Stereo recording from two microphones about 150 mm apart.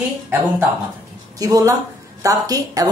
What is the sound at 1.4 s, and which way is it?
Speech, 20° right (ahead or behind).